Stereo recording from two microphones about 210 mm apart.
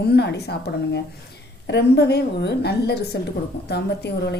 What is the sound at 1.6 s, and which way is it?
Speech, 55° left (ahead or behind).